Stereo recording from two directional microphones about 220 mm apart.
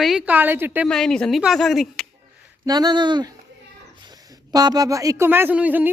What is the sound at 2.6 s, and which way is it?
Speech, 20° right (ahead or behind).